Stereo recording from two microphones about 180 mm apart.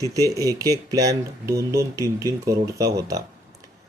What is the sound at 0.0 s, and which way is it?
A man's voice, 20° right (ahead or behind).